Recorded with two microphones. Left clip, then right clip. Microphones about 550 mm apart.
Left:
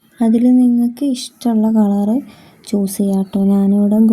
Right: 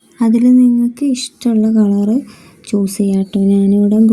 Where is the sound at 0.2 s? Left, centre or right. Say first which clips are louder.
Right 2 dB; left.